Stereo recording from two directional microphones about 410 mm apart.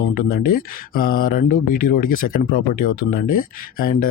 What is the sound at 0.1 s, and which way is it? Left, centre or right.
Speech, left.